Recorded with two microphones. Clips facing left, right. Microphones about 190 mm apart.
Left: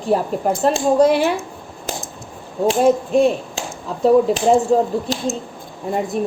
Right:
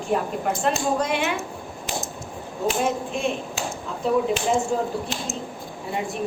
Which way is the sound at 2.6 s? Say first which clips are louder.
Left 9 dB; 35° left (ahead or behind).